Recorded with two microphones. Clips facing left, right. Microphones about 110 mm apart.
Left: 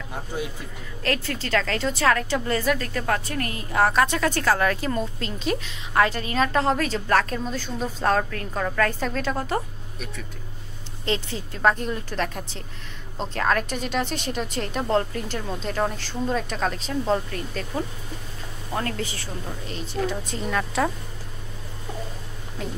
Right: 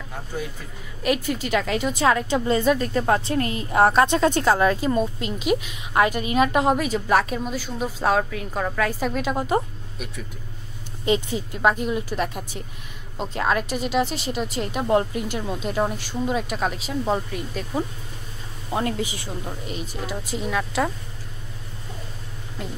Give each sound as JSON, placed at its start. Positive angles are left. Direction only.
{"t": 1.0, "sound": "a woman's voice", "side_deg": -15}
{"t": 22.6, "sound": "a woman's voice", "side_deg": -5}